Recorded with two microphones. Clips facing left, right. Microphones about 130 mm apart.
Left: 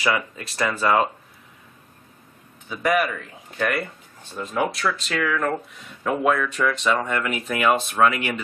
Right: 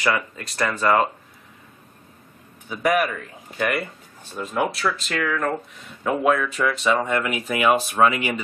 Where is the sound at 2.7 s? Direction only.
5° right (ahead or behind).